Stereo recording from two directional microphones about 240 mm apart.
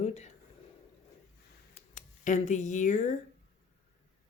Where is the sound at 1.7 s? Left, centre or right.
Left.